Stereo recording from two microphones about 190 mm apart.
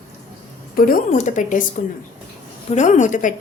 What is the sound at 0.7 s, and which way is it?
A woman's voice, 50° left (ahead or behind).